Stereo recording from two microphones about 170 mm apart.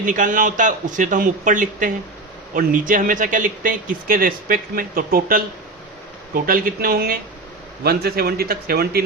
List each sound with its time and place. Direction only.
0.0 s a man's voice: 50° right (ahead or behind)